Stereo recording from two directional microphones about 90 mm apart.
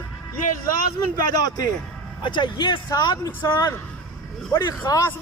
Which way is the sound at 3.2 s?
35° left (ahead or behind).